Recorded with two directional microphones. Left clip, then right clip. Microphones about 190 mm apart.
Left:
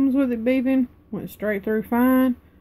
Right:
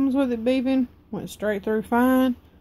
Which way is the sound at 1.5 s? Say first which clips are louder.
Left 1 dB; 35° right (ahead or behind).